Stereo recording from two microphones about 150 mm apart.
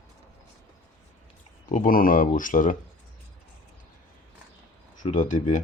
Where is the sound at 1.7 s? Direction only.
65° left (ahead or behind).